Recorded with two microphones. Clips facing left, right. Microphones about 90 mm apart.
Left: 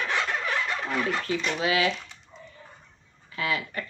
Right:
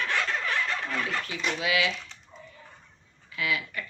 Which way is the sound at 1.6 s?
40° left (ahead or behind).